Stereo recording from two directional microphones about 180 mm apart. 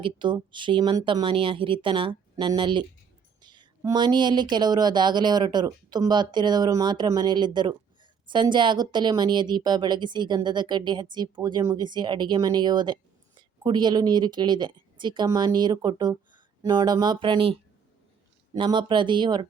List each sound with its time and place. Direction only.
0.0 s speech: 25° right (ahead or behind)